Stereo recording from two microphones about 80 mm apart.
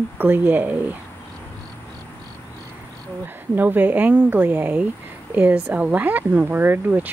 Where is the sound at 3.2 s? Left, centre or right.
Right.